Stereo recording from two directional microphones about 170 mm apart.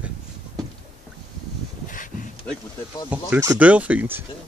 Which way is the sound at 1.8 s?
50° left (ahead or behind).